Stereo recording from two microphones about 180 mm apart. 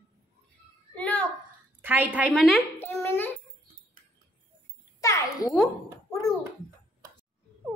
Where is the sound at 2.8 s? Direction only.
15° left (ahead or behind).